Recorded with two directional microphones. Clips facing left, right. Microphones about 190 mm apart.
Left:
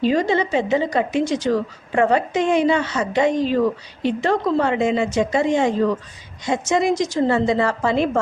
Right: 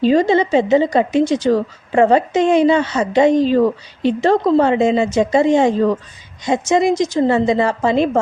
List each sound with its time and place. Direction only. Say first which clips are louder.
0.0 s a woman's voice: right 5 dB; 30° right (ahead or behind)